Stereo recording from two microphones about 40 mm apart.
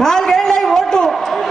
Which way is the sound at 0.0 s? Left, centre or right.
Centre.